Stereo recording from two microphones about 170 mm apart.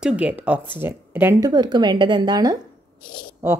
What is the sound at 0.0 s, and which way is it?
A woman's voice, 5° right (ahead or behind).